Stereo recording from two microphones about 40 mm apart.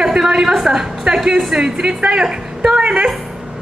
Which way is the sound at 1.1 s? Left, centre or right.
Right.